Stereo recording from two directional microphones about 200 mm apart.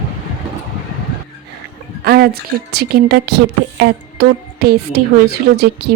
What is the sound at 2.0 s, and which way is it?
A woman's voice, 50° right (ahead or behind).